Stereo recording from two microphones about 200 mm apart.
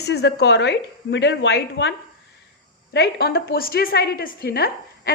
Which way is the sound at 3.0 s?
55° left (ahead or behind).